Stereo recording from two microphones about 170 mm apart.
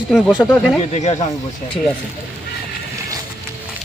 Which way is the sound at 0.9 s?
40° left (ahead or behind).